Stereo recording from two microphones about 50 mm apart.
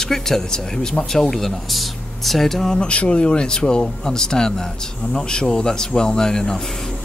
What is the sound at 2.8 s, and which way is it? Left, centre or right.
Speech, left.